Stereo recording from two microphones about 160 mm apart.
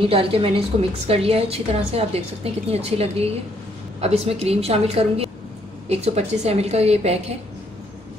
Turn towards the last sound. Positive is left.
turn(degrees=-40)  # may be behind; listen again after turning